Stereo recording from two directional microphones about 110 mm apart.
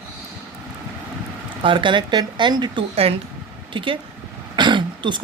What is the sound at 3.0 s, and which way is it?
Speech, 65° right (ahead or behind).